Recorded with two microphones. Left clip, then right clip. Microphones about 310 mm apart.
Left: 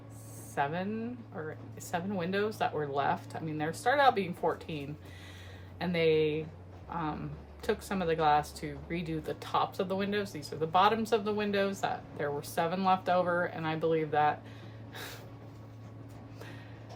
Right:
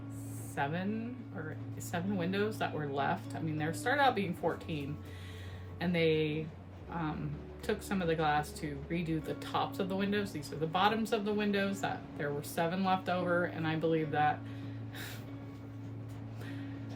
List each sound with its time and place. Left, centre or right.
0.5 s speech: centre
5.8 s speech: centre